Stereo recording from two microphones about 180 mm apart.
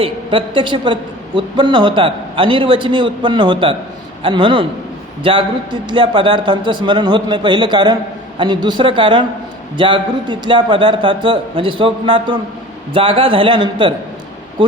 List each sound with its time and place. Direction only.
0.0 s a man's voice: 30° right (ahead or behind)